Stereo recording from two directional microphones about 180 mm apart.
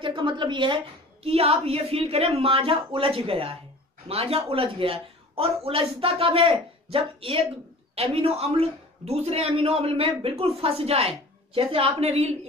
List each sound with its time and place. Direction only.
0.0 s a woman's voice: 30° right (ahead or behind)